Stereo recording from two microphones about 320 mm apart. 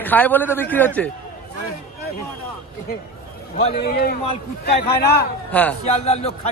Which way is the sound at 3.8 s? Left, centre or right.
Left.